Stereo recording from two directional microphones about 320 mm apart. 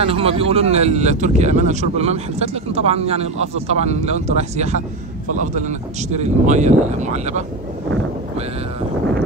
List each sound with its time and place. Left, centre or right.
0.0 s speech: centre